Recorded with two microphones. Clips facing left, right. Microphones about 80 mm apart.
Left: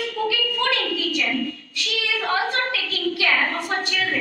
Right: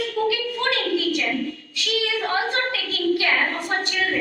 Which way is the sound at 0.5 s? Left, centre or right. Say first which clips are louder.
Right 1 dB; right.